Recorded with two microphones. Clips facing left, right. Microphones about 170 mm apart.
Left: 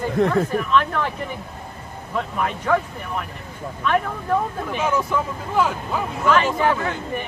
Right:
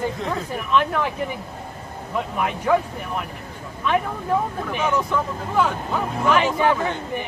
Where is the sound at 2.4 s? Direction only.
10° right (ahead or behind).